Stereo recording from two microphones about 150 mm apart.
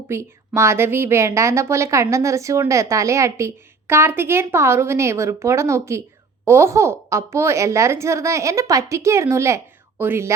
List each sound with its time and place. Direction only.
0.1 s a woman's voice: 20° right (ahead or behind)